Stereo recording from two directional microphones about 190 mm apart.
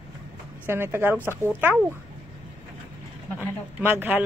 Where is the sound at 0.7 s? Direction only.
10° right (ahead or behind).